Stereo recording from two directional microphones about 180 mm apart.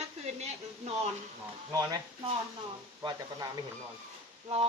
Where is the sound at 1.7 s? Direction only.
20° right (ahead or behind).